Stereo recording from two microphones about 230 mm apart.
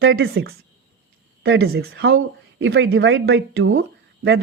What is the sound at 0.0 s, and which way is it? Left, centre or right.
Speech, right.